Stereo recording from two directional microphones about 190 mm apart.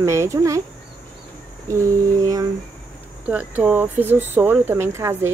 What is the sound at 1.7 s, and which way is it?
Speech, 15° right (ahead or behind).